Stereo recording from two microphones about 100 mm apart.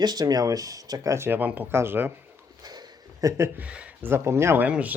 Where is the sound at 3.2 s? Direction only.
35° right (ahead or behind).